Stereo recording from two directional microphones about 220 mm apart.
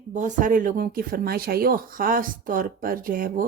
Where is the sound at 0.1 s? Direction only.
35° right (ahead or behind).